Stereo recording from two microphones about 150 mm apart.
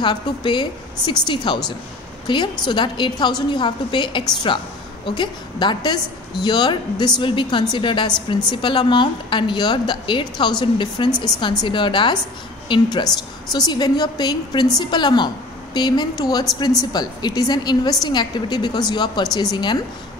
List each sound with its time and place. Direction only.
0.0 s a woman's voice: 30° left (ahead or behind)